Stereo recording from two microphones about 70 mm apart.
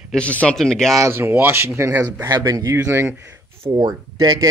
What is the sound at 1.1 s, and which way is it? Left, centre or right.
Speech, right.